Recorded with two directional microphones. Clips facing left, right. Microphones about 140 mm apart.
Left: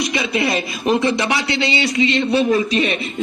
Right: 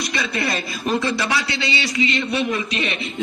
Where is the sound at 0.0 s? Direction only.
20° left (ahead or behind).